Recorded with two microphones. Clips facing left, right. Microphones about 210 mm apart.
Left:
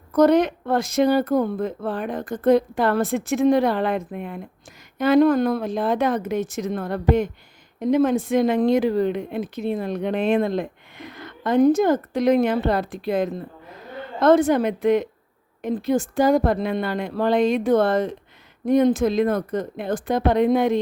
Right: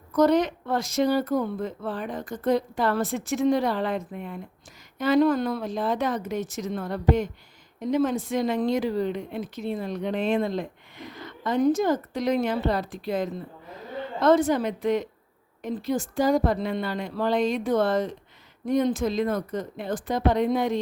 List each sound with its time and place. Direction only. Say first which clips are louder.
0.1 s speech: left 4 dB; 55° left (ahead or behind)